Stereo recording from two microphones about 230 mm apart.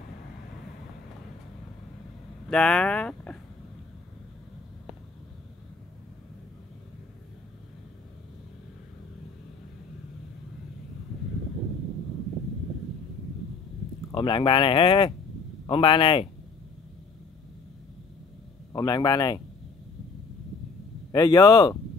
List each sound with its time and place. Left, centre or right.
2.5 s speech: centre
14.1 s speech: left
18.7 s a man's voice: centre
21.1 s a man's voice: centre